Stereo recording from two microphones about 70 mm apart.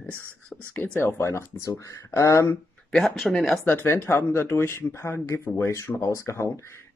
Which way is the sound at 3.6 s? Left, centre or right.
Left.